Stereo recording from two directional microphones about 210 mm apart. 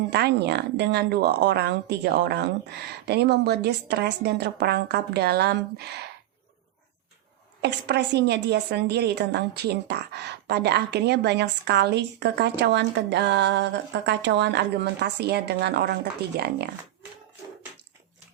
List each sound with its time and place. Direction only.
0.1 s a woman's voice: 50° right (ahead or behind)
7.6 s a woman's voice: 55° right (ahead or behind)